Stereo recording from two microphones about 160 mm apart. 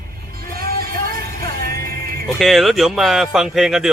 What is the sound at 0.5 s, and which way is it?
Music, 70° right (ahead or behind).